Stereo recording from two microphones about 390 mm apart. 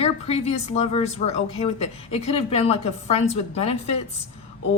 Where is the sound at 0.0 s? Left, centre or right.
Centre.